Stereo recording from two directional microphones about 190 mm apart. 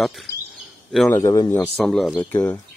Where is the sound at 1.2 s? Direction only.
15° left (ahead or behind).